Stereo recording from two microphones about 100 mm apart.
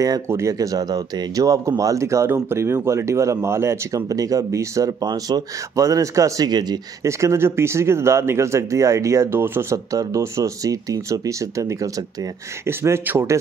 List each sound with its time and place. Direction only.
0.3 s speech: 30° right (ahead or behind)
7.1 s speech: 30° right (ahead or behind)